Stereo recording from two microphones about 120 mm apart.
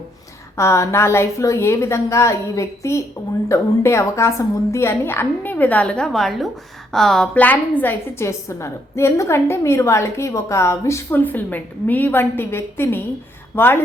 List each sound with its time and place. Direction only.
0.5 s a woman's voice: 25° left (ahead or behind)